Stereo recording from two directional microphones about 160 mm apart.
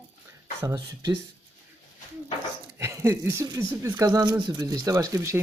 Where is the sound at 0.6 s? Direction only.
25° right (ahead or behind).